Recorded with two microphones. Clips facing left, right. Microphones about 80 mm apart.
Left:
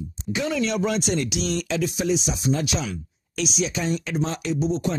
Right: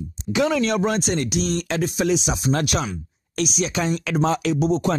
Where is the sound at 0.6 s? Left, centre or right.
Right.